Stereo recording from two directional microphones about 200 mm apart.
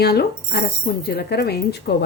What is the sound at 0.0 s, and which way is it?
Speech, 55° left (ahead or behind).